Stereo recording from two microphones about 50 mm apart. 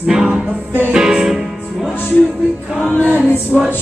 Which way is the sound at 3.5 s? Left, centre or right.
Centre.